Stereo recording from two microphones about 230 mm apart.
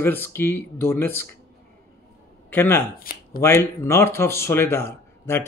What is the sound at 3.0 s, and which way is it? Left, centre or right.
Speech, left.